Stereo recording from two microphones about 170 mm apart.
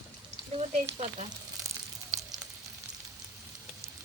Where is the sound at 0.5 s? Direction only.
40° right (ahead or behind).